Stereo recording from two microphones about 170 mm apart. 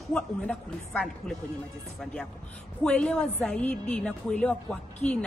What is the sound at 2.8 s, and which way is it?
A woman's voice, 5° left (ahead or behind).